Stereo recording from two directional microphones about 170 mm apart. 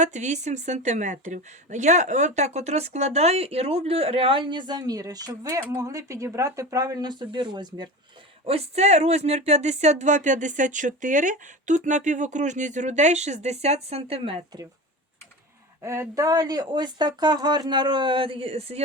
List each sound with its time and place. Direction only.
0.0 s a woman's voice: 45° right (ahead or behind); by 7.9 s 25° right (ahead or behind)
8.4 s speech: 35° right (ahead or behind)
15.8 s speech: 15° right (ahead or behind); by 18.8 s 35° right (ahead or behind)